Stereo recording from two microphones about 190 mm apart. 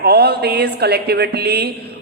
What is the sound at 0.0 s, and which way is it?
A woman's voice, 55° right (ahead or behind).